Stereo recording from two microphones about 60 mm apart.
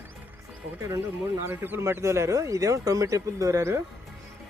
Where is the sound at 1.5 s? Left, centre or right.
Right.